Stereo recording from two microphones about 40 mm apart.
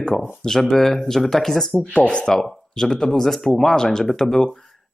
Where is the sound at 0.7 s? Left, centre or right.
Centre.